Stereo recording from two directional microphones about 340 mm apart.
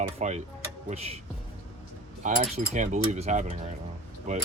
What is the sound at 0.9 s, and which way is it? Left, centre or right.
Speech, centre.